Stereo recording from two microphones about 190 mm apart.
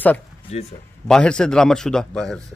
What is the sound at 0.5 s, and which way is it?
Speech, 35° left (ahead or behind).